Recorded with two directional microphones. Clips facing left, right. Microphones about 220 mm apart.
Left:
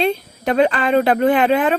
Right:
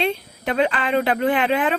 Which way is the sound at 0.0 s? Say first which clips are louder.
Left 4 dB; 40° left (ahead or behind).